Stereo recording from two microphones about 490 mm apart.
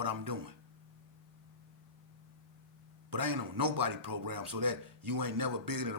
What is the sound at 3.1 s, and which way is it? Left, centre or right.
Speech, right.